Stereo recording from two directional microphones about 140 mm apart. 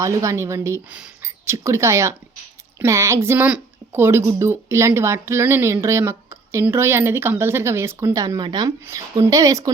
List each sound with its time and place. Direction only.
0.0 s a woman's voice: 20° right (ahead or behind)